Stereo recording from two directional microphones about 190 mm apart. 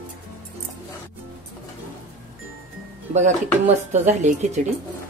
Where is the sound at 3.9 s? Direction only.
40° right (ahead or behind).